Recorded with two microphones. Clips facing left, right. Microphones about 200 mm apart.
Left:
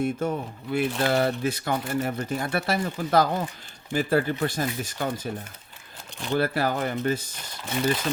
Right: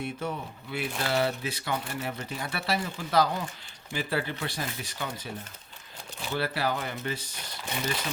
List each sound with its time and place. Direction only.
0.0 s speech: 45° left (ahead or behind)
6.3 s speech: 50° left (ahead or behind)